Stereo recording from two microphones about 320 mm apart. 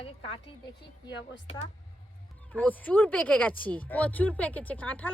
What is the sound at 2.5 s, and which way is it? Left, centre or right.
Speech, centre.